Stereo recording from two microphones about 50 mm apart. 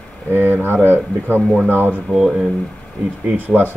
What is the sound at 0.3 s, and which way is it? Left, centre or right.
A man's voice, right.